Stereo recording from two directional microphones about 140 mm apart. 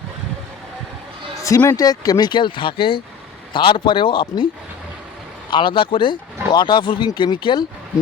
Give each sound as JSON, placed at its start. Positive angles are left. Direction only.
{"t": 1.5, "sound": "speech", "side_deg": 20}
{"t": 5.5, "sound": "speech", "side_deg": 35}